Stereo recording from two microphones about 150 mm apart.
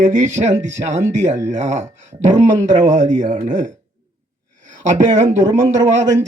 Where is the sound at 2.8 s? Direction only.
55° right (ahead or behind).